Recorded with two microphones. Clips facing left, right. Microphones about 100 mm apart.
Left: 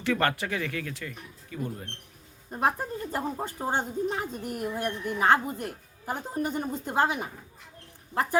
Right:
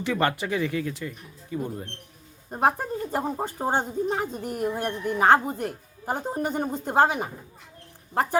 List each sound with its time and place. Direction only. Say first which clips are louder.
0.0 s speech: right 1 dB; 20° right (ahead or behind)